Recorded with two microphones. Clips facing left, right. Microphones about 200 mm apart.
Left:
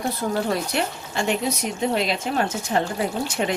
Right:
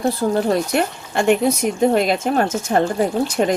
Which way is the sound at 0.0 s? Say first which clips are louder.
Right 6 dB; 30° right (ahead or behind).